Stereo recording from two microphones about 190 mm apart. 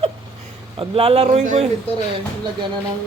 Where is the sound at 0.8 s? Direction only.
30° right (ahead or behind).